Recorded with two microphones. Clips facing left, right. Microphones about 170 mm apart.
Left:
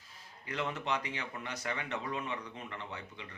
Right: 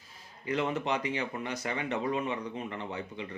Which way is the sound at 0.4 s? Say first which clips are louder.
Right 6 dB; 15° right (ahead or behind).